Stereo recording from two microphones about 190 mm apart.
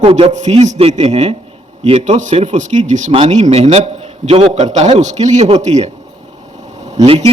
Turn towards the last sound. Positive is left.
turn(degrees=-30)  # may be behind; listen again after turning